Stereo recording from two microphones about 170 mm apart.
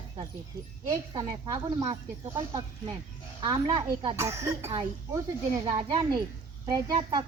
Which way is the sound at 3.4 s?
25° right (ahead or behind).